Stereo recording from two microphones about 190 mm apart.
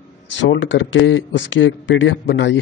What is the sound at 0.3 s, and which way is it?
Speech, 75° left (ahead or behind).